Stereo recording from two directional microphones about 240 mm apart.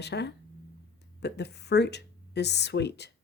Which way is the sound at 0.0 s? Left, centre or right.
Left.